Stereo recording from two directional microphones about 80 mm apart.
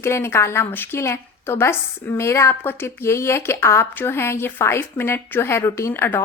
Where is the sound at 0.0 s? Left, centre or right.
Left.